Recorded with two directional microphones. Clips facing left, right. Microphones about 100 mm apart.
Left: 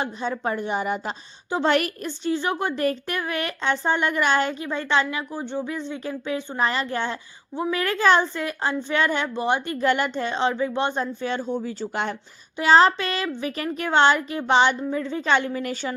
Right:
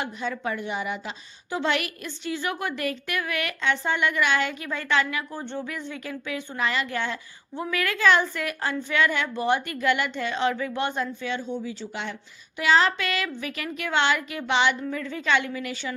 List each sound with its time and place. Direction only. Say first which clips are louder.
0.0 s a woman's voice: left 3 dB; 30° left (ahead or behind)
5.3 s speech: left 4 dB; 15° left (ahead or behind)
5.6 s a woman's voice: left 4 dB; 25° left (ahead or behind)
9.7 s a woman's voice: left 3 dB; 35° left (ahead or behind)
14.8 s a woman's voice: left 4 dB; 25° left (ahead or behind)